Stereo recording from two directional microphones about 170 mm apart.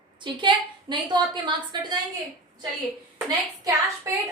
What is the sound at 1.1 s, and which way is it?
Speech, 25° right (ahead or behind).